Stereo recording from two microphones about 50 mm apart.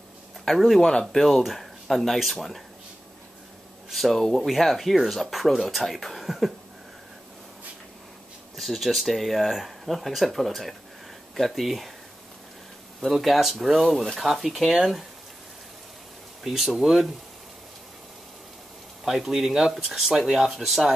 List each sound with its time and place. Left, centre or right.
0.5 s speech: centre
0.8 s speech: centre
1.2 s speech: centre
3.9 s speech: centre
8.5 s speech: centre
13.0 s speech: centre
16.4 s speech: centre
19.0 s speech: centre